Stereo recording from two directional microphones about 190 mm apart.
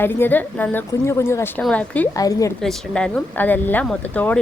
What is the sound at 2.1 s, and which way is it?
Speech, 20° left (ahead or behind).